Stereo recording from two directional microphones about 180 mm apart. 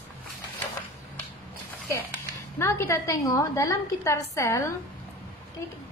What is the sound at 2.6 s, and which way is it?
A woman's voice, 15° left (ahead or behind).